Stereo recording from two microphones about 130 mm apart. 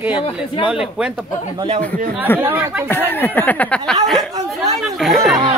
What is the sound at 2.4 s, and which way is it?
Speech, 15° right (ahead or behind).